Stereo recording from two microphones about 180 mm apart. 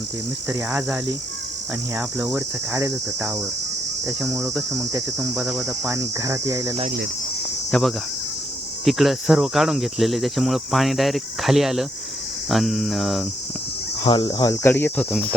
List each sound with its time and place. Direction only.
0.4 s cricket: 10° right (ahead or behind)
4.3 s cricket: 15° right (ahead or behind)
4.5 s speech: centre (ahead or behind)
5.6 s cricket: 15° right (ahead or behind)
7.7 s speech: centre (ahead or behind)
14.0 s speech: 25° left (ahead or behind)